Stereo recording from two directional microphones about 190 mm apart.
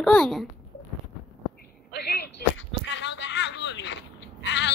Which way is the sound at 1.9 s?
60° left (ahead or behind).